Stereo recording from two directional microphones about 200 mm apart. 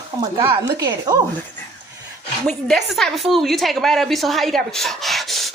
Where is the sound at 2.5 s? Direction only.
Centre (ahead or behind).